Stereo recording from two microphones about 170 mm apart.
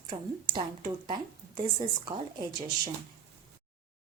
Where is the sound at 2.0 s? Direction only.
25° right (ahead or behind).